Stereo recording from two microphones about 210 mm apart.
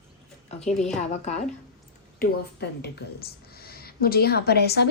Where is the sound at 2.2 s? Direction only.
50° left (ahead or behind).